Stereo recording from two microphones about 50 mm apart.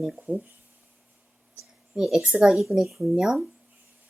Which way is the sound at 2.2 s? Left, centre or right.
Centre.